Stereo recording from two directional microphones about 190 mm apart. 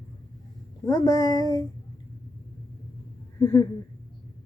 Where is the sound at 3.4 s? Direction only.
20° left (ahead or behind).